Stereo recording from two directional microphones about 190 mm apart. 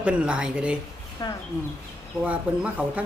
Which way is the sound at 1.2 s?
25° left (ahead or behind).